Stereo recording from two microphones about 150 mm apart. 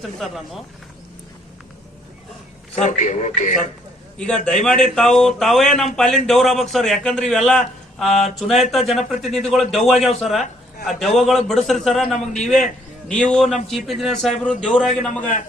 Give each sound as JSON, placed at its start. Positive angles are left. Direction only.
{"t": 0.0, "sound": "speech", "side_deg": 0}
{"t": 2.7, "sound": "a man's voice", "side_deg": 50}
{"t": 4.4, "sound": "speech", "side_deg": 5}